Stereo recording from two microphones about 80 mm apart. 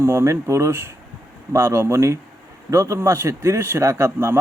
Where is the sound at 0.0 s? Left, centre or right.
Right.